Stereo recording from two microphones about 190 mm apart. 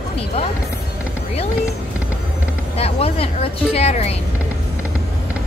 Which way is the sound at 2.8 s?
30° left (ahead or behind).